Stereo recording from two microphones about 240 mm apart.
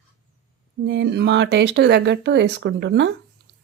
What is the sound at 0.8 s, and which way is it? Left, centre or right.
Speech, right.